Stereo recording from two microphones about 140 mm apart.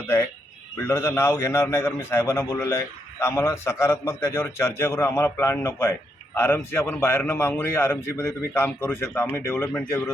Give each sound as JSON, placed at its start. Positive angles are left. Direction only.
{"t": 0.9, "sound": "a man's voice", "side_deg": 15}